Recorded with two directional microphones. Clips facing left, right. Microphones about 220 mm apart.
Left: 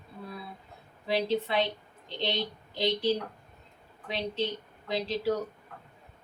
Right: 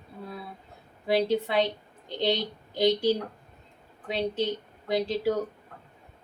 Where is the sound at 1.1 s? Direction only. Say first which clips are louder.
Right 4 dB; 50° right (ahead or behind).